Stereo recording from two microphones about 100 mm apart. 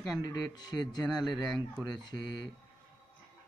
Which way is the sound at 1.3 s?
5° left (ahead or behind).